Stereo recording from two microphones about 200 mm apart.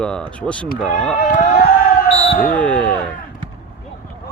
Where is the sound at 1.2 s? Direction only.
45° left (ahead or behind).